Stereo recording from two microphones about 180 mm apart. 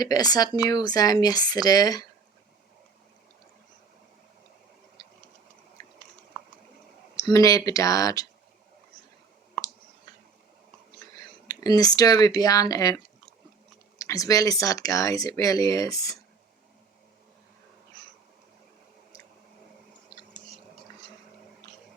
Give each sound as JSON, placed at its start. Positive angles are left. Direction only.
{"t": 0.0, "sound": "speech", "side_deg": 20}
{"t": 5.8, "sound": "a sound", "side_deg": 20}
{"t": 7.2, "sound": "speech", "side_deg": 20}
{"t": 11.0, "sound": "speech", "side_deg": 20}
{"t": 14.0, "sound": "speech", "side_deg": 20}